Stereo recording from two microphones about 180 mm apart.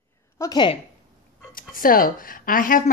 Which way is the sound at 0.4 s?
25° left (ahead or behind).